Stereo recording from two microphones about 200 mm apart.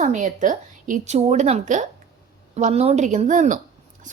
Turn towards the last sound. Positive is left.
turn(degrees=-40)  # may be behind; listen again after turning